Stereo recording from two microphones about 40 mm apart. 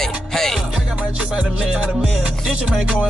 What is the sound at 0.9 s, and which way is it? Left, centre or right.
Music, right.